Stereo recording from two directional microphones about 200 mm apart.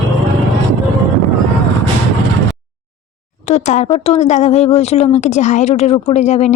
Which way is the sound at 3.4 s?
35° left (ahead or behind).